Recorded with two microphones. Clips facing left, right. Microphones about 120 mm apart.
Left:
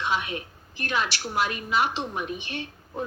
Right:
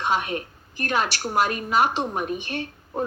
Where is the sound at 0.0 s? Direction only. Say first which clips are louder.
Right 4 dB; 45° right (ahead or behind).